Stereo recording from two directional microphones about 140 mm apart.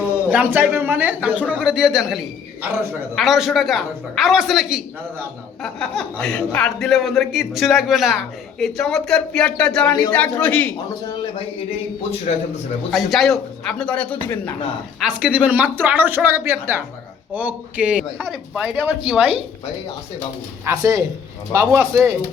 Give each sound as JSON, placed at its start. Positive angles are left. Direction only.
{"t": 0.3, "sound": "a man's voice", "side_deg": -10}
{"t": 12.3, "sound": "a man's voice", "side_deg": 55}
{"t": 12.9, "sound": "a man's voice", "side_deg": 0}
{"t": 15.0, "sound": "speech", "side_deg": -10}
{"t": 18.2, "sound": "a man's voice", "side_deg": 5}
{"t": 18.6, "sound": "speech", "side_deg": -10}
{"t": 20.7, "sound": "speech", "side_deg": -25}